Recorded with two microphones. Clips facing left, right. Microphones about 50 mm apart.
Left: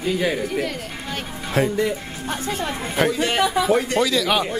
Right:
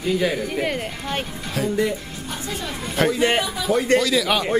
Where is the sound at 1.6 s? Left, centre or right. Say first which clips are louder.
Left 4 dB; left.